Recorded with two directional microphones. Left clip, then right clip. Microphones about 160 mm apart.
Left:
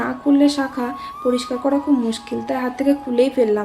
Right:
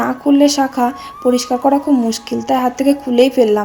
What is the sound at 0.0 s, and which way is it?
Speech, 35° right (ahead or behind).